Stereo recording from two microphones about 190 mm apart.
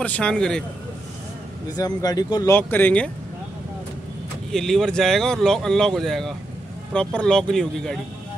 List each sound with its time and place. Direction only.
0.0 s speech: 5° left (ahead or behind)
1.7 s speech: 20° left (ahead or behind)
4.5 s speech: centre (ahead or behind)